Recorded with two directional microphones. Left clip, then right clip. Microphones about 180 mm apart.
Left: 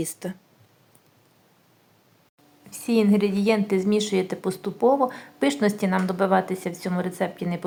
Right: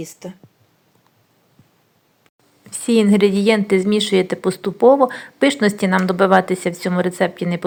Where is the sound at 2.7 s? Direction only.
20° right (ahead or behind).